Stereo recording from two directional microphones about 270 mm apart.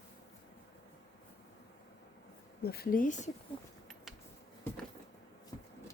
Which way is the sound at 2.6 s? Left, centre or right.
Left.